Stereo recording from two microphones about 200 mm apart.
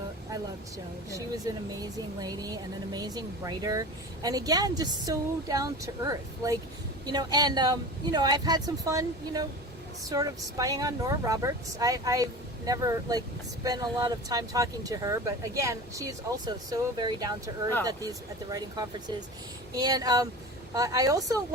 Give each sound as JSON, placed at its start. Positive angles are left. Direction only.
{"t": 1.1, "sound": "speech", "side_deg": -20}
{"t": 18.5, "sound": "speech", "side_deg": -20}